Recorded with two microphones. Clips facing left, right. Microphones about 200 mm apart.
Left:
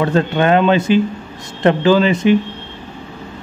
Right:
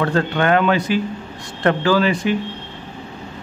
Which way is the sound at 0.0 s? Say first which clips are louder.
Left 3 dB; 20° left (ahead or behind).